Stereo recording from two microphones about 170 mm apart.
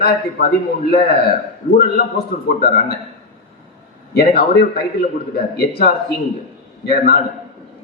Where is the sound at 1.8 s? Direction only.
65° left (ahead or behind).